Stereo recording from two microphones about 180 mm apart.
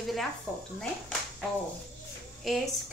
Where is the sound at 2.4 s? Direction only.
Centre (ahead or behind).